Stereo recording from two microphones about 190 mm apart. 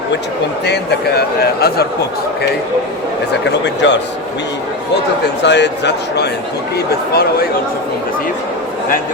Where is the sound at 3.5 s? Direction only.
65° left (ahead or behind).